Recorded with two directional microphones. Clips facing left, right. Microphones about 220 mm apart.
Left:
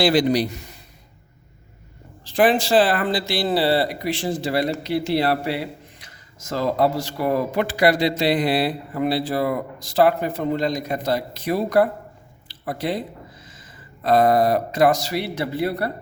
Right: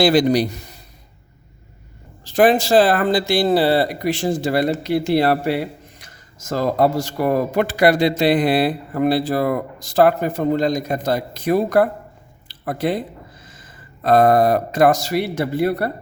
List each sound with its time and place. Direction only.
0.0 s speech: 45° right (ahead or behind)
2.2 s speech: 45° right (ahead or behind)
12.5 s a sound: 50° right (ahead or behind)
13.4 s speech: 50° right (ahead or behind)